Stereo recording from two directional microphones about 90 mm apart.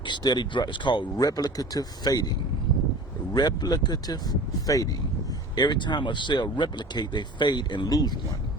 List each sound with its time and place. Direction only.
0.0 s speech: 55° left (ahead or behind)
1.2 s speech: 45° left (ahead or behind)
3.3 s speech: 50° left (ahead or behind)
5.5 s speech: 55° left (ahead or behind)